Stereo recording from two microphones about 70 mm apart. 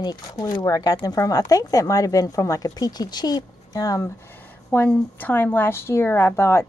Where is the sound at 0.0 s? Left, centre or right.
Left.